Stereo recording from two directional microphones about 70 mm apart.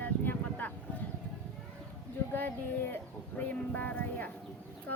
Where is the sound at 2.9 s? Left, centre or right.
Left.